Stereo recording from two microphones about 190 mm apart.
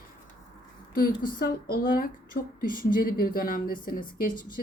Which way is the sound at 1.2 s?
50° left (ahead or behind).